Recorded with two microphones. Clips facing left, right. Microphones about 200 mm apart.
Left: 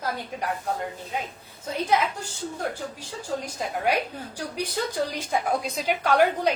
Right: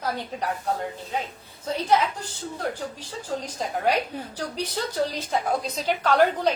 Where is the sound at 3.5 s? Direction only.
10° left (ahead or behind).